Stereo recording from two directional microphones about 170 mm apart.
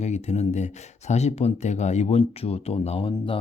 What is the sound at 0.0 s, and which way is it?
Speech, 40° left (ahead or behind).